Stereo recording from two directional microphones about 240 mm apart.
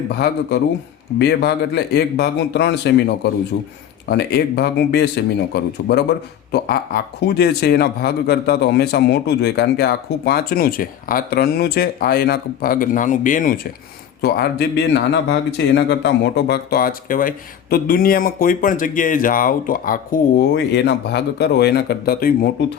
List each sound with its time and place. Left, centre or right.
0.1 s a man's voice: left